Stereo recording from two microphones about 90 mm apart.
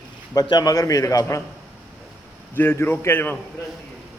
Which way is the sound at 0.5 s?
45° left (ahead or behind).